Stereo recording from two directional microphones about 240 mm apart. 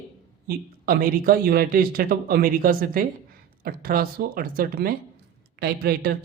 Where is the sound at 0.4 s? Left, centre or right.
Right.